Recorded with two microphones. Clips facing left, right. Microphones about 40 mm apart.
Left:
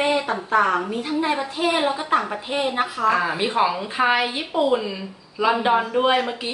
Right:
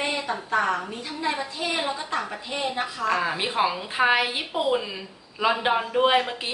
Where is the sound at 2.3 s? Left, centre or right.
Left.